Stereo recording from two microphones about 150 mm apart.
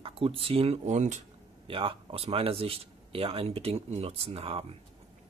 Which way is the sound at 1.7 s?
35° right (ahead or behind).